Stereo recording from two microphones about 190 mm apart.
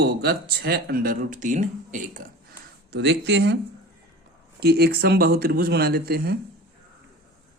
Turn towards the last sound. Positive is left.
turn(degrees=-55)  # may be behind; listen again after turning